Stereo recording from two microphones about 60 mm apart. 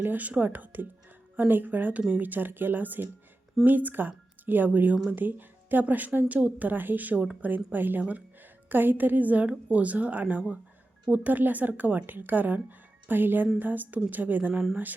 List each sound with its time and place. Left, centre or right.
0.0 s speech: right
14.5 s speech: centre